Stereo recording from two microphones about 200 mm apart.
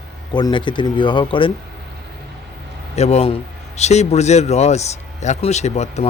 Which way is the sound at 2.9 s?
30° left (ahead or behind).